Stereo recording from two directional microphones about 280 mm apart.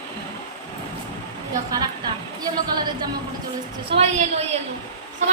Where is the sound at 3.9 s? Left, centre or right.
Right.